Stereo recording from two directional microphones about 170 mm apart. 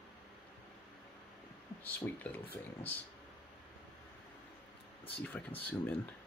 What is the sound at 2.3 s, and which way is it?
Speech, 10° left (ahead or behind).